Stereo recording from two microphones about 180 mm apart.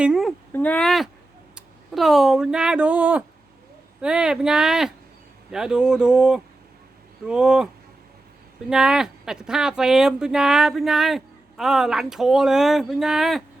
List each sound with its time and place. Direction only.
0.0 s speech: centre (ahead or behind)
8.7 s speech: 5° right (ahead or behind)